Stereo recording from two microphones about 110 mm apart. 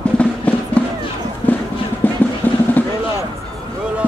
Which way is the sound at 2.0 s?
15° left (ahead or behind).